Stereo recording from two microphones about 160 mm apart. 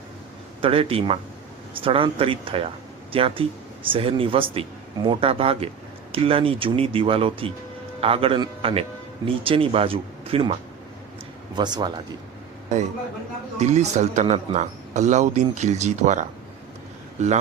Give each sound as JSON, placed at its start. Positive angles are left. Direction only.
{"t": 0.6, "sound": "a man's voice", "side_deg": -35}
{"t": 13.6, "sound": "speech", "side_deg": -45}